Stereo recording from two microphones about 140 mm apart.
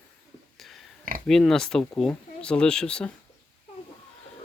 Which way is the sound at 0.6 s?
Centre (ahead or behind).